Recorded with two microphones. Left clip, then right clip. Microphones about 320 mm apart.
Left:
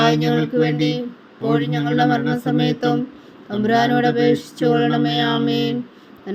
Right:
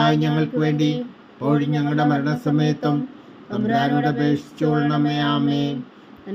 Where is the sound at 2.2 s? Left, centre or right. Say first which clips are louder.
Left 2 dB; centre.